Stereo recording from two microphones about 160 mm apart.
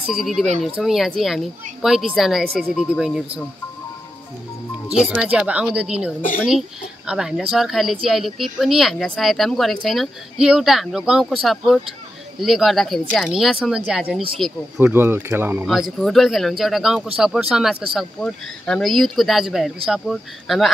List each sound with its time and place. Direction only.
0.0 s speech: centre (ahead or behind)
5.3 s speech: 10° right (ahead or behind)
14.8 s speech: 15° right (ahead or behind)
15.6 s speech: centre (ahead or behind)